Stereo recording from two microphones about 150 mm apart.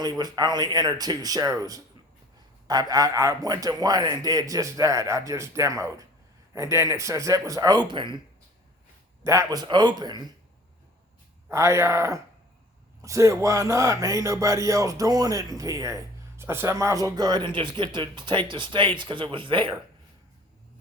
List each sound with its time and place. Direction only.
0.0 s speech: 25° right (ahead or behind)
9.2 s speech: 20° right (ahead or behind)
11.4 s speech: 20° right (ahead or behind); by 19.7 s 35° right (ahead or behind)